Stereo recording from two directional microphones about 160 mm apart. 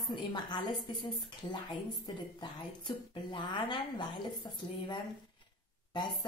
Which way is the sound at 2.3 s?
30° left (ahead or behind).